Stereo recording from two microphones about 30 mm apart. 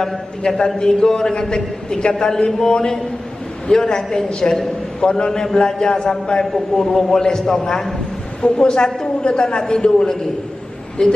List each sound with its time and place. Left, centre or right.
0.0 s a man's voice: centre
6.4 s a man's voice: centre
6.9 s a man's voice: centre
8.4 s a woman's voice: left